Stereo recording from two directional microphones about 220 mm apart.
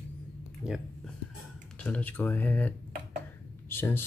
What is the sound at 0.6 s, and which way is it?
Speech, centre (ahead or behind).